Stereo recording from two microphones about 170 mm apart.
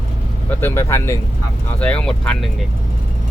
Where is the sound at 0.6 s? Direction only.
15° left (ahead or behind).